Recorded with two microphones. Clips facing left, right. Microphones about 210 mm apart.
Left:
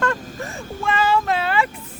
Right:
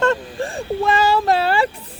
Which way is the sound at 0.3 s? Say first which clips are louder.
Right 8 dB; 30° right (ahead or behind).